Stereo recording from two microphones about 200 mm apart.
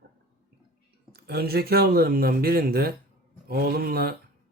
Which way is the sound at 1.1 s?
50° right (ahead or behind).